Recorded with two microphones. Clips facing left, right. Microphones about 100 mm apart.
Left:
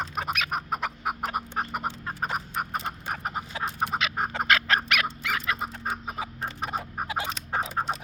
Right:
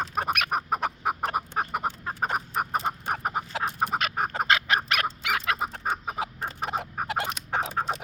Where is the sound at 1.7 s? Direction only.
15° right (ahead or behind).